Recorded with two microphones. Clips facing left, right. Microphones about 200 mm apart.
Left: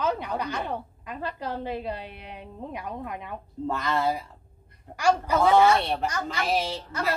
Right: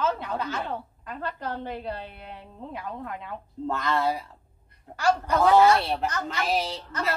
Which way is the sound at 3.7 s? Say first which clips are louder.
Even; centre (ahead or behind).